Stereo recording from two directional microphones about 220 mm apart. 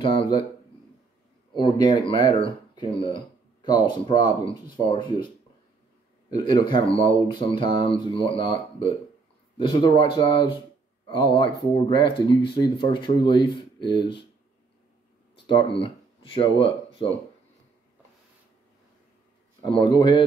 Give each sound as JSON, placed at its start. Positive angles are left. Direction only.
{"t": 0.0, "sound": "speech", "side_deg": 25}
{"t": 1.6, "sound": "speech", "side_deg": 20}
{"t": 6.3, "sound": "speech", "side_deg": 20}
{"t": 15.3, "sound": "speech", "side_deg": 25}
{"t": 19.8, "sound": "speech", "side_deg": 20}